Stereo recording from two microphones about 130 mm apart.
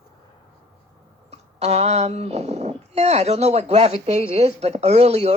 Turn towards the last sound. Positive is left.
turn(degrees=-50)  # may be behind; listen again after turning